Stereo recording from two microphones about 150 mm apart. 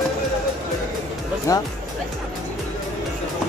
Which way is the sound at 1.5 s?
20° left (ahead or behind).